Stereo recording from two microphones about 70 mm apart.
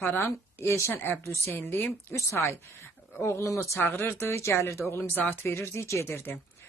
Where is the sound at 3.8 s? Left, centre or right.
Left.